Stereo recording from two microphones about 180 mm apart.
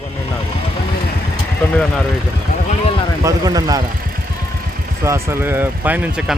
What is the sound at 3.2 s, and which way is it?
Speech, 20° right (ahead or behind).